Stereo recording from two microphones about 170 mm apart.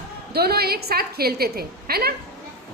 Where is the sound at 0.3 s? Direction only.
65° right (ahead or behind).